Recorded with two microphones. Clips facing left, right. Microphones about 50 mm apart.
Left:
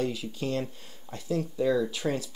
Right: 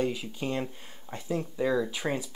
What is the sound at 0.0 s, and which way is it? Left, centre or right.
Speech, right.